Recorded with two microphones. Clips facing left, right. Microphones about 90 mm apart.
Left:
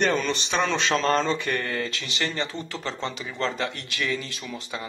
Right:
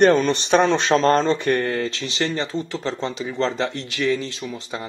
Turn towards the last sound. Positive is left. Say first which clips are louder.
# right 4 dB
turn(degrees=-25)  # may be behind; listen again after turning